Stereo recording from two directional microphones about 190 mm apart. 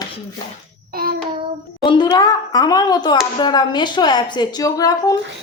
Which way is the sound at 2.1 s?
20° left (ahead or behind).